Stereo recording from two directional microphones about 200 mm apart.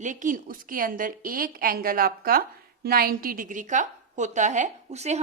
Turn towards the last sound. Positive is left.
turn(degrees=-35)  # may be behind; listen again after turning